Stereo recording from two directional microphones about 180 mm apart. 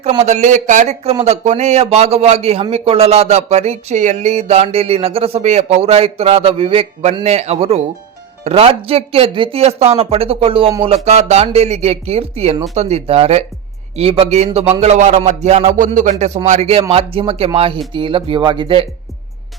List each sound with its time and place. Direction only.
0.0 s a man's voice: 35° right (ahead or behind)